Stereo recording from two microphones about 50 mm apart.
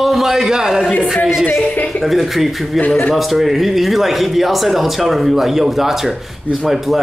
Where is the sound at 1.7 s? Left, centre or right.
Left.